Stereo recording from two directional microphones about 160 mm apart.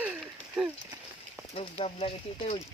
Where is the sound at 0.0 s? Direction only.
5° right (ahead or behind).